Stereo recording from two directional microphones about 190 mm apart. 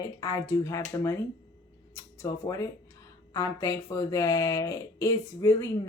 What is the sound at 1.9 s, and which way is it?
Speech, 15° left (ahead or behind).